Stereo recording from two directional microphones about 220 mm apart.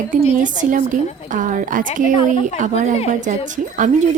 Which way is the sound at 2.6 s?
35° right (ahead or behind).